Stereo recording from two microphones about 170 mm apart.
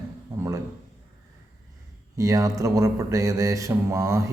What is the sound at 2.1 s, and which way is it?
Speech, 20° right (ahead or behind).